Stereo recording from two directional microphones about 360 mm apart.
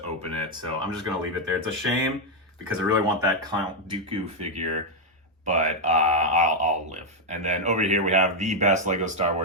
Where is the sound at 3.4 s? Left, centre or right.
Centre.